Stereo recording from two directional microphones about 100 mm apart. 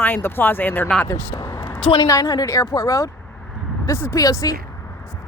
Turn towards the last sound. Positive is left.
turn(degrees=35)  # may be behind; listen again after turning